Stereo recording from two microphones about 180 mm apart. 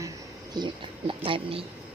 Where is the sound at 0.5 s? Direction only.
25° right (ahead or behind).